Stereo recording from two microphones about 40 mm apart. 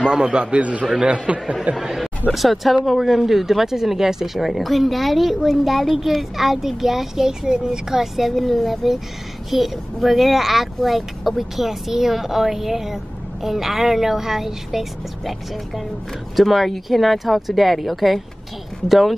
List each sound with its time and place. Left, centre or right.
0.0 s a man's voice: centre
1.8 s speech: centre